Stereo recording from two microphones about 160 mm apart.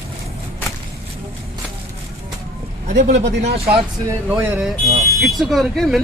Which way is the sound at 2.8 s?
45° right (ahead or behind).